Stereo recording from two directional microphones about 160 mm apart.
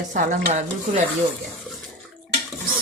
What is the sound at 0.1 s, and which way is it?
Stir, 55° right (ahead or behind).